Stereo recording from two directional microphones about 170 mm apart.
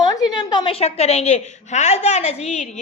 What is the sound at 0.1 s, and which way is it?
A woman's voice, 25° left (ahead or behind).